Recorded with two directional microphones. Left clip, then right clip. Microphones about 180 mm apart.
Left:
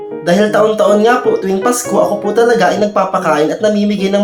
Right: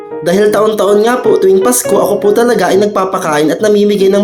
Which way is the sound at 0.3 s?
30° right (ahead or behind).